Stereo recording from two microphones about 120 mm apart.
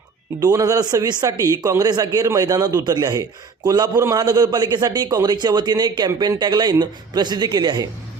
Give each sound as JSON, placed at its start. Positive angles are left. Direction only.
{"t": 0.3, "sound": "speech", "side_deg": -30}